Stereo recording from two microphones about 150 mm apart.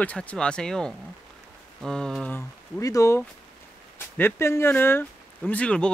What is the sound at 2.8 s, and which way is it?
Speech, 20° left (ahead or behind).